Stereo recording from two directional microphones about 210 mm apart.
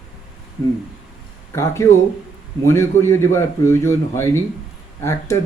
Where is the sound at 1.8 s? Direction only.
15° left (ahead or behind).